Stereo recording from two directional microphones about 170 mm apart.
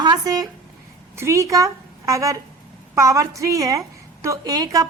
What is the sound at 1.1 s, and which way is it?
A woman's voice, 15° right (ahead or behind).